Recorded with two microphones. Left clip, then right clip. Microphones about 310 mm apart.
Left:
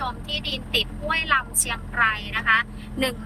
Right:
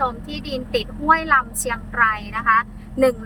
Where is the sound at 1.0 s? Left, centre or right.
Centre.